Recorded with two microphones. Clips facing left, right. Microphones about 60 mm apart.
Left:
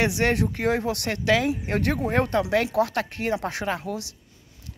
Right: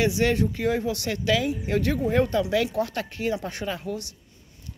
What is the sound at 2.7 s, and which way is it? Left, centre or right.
Speech, left.